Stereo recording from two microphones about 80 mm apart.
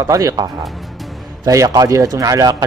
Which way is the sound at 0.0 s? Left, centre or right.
Right.